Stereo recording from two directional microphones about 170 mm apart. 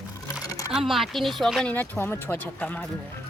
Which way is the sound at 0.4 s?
20° left (ahead or behind).